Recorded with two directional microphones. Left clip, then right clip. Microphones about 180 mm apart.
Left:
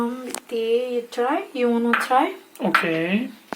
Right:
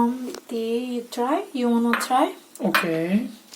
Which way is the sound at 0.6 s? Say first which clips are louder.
Left 6 dB; 60° right (ahead or behind).